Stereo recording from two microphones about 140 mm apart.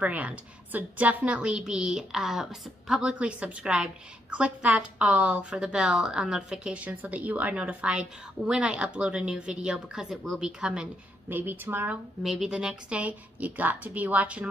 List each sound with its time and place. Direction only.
0.0 s a woman's voice: 10° right (ahead or behind)
12.2 s a woman's voice: 5° right (ahead or behind)